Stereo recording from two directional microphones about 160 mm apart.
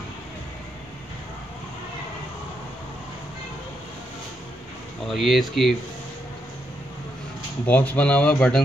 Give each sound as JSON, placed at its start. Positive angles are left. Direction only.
{"t": 5.0, "sound": "speech", "side_deg": 0}
{"t": 7.6, "sound": "speech", "side_deg": 10}